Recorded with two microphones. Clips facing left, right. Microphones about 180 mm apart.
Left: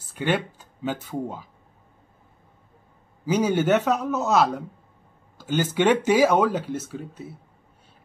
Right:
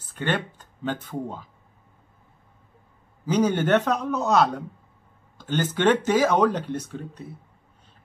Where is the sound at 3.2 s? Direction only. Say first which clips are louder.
Left 1 dB; 10° left (ahead or behind).